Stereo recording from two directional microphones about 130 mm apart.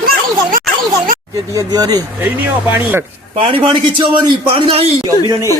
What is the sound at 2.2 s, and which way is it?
Speech, 15° right (ahead or behind).